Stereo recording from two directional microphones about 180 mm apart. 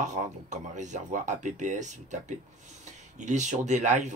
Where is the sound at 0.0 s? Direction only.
40° right (ahead or behind).